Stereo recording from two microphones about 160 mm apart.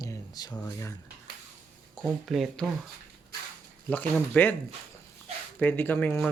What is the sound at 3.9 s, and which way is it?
Speech, 10° left (ahead or behind).